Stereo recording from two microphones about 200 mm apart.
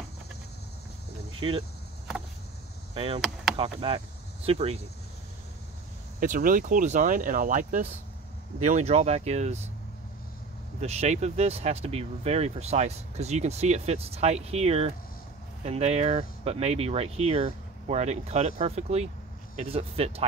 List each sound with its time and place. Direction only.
1.4 s speech: 25° right (ahead or behind)
2.9 s door: 30° right (ahead or behind)
3.5 s speech: 30° right (ahead or behind)
6.1 s speech: 45° right (ahead or behind)
10.8 s speech: 35° right (ahead or behind)